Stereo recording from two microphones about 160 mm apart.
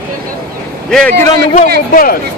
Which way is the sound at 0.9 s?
5° left (ahead or behind).